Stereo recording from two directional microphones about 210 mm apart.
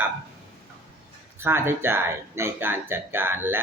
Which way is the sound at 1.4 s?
10° right (ahead or behind).